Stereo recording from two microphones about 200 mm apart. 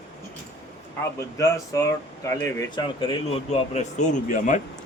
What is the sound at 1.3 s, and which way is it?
A man's voice, 15° left (ahead or behind).